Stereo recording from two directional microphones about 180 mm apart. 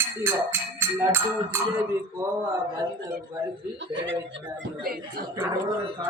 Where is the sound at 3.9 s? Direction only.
85° right.